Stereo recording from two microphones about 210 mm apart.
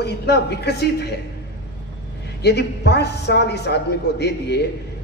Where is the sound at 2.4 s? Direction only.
50° left (ahead or behind).